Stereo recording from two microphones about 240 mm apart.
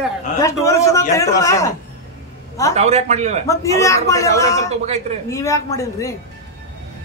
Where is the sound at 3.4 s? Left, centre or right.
Centre.